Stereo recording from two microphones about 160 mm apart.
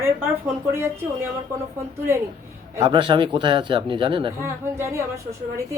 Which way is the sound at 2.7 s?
30° right (ahead or behind).